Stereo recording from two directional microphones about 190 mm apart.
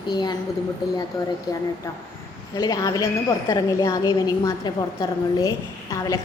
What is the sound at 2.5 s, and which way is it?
A woman's voice, 20° left (ahead or behind).